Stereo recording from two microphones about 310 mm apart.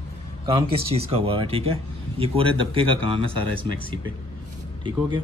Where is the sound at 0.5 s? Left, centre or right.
Centre.